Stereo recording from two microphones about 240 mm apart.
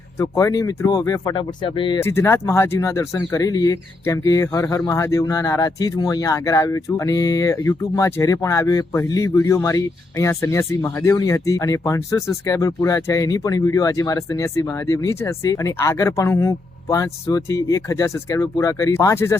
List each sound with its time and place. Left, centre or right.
0.2 s speech: centre
2.0 s speech: centre